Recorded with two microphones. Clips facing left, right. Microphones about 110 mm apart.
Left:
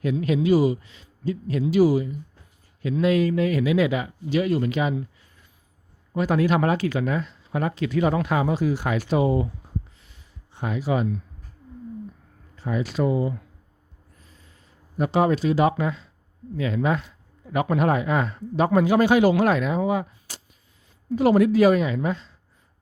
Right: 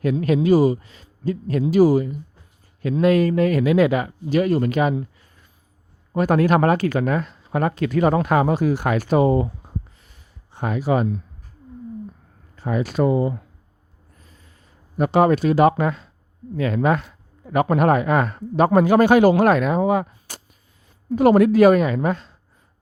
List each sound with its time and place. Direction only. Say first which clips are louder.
0.0 s speech: right 3 dB; 50° right (ahead or behind)
6.1 s speech: right 4 dB; 50° right (ahead or behind)
10.0 s a sound: even; 50° right (ahead or behind)
12.5 s speech: right 4 dB; 50° right (ahead or behind)
14.9 s speech: right 4 dB; 55° right (ahead or behind)